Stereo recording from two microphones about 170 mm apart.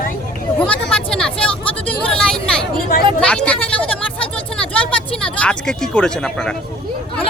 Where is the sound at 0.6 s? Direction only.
5° left (ahead or behind).